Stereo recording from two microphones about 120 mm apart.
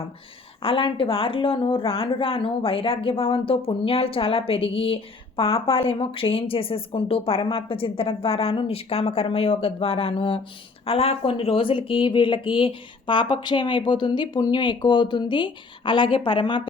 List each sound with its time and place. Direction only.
0.6 s a woman's voice: 50° left (ahead or behind)